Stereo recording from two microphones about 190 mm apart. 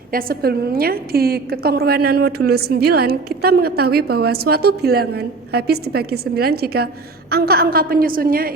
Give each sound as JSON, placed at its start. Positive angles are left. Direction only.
{"t": 0.1, "sound": "a woman's voice", "side_deg": -50}